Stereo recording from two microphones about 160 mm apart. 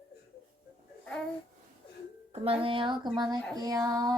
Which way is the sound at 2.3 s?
35° right (ahead or behind).